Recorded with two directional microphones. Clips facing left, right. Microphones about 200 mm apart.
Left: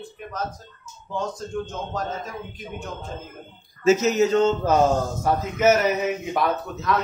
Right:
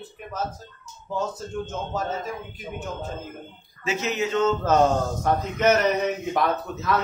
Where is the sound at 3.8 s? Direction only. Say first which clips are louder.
Left 8 dB; 40° left (ahead or behind).